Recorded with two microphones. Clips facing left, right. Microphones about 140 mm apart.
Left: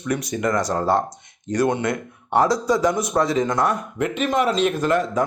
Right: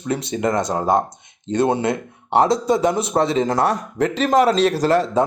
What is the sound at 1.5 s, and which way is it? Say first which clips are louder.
Speech: right 2 dB; 25° right (ahead or behind).